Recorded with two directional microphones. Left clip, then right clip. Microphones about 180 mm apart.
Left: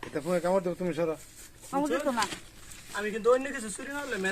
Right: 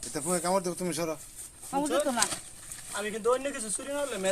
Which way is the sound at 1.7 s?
35° right (ahead or behind).